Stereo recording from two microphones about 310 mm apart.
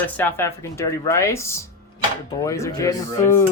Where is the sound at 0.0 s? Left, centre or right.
Centre.